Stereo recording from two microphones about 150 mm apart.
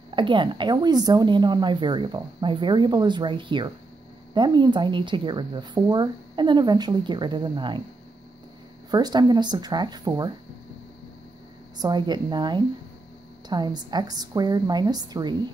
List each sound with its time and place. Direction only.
0.1 s a woman's voice: 35° right (ahead or behind)
8.9 s a woman's voice: 25° right (ahead or behind)
11.8 s a woman's voice: 30° right (ahead or behind)